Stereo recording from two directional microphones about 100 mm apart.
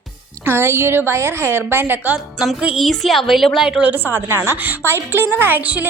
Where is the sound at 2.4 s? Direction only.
5° right (ahead or behind).